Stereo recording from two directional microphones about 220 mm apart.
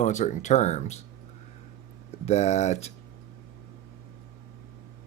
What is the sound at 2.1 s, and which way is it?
Speech, 30° left (ahead or behind).